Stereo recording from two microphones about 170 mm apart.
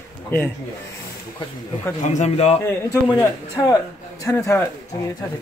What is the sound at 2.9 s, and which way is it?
Music, 20° left (ahead or behind).